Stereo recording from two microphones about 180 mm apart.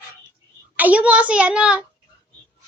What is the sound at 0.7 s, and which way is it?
A child's voice, 10° right (ahead or behind).